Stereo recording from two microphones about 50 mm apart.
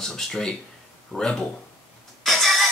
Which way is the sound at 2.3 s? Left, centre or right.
Centre.